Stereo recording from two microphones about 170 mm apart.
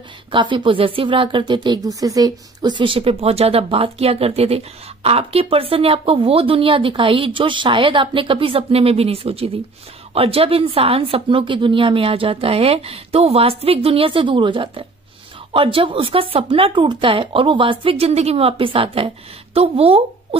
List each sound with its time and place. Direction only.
0.3 s speech: 30° right (ahead or behind)